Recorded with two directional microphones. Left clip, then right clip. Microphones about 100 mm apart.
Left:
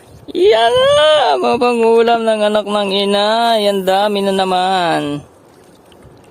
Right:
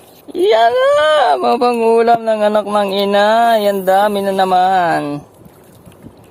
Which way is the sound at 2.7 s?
45° left (ahead or behind).